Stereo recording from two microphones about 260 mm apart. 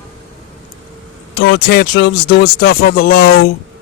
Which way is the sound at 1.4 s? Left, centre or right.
Left.